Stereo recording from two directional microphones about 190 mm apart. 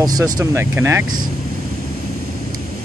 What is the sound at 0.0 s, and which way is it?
Speech, 20° right (ahead or behind).